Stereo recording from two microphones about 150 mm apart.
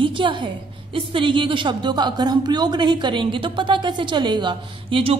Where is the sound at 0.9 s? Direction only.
35° right (ahead or behind).